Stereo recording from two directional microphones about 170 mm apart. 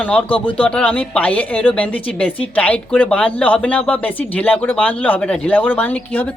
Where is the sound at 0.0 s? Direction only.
10° left (ahead or behind).